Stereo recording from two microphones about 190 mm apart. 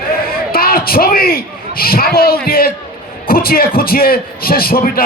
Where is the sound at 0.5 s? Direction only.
50° left (ahead or behind).